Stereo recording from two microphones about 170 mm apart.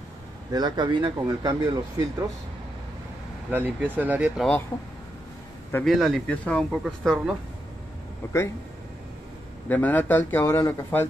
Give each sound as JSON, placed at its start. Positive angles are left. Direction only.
{"t": 0.5, "sound": "speech", "side_deg": -25}
{"t": 3.4, "sound": "speech", "side_deg": -10}
{"t": 5.9, "sound": "speech", "side_deg": 0}
{"t": 6.8, "sound": "speech", "side_deg": -5}
{"t": 8.2, "sound": "speech", "side_deg": 15}
{"t": 9.7, "sound": "speech", "side_deg": 10}